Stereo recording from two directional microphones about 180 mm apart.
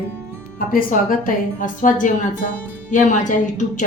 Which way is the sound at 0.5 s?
50° left (ahead or behind).